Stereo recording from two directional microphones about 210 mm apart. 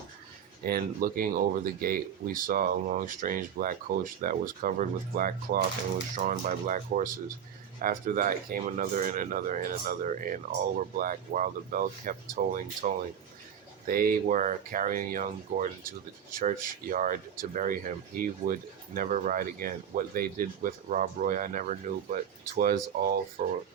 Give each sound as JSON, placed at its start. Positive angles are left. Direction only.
{"t": 0.6, "sound": "speech", "side_deg": -45}